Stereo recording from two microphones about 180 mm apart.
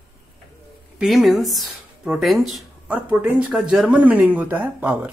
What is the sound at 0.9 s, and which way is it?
Speech, centre (ahead or behind).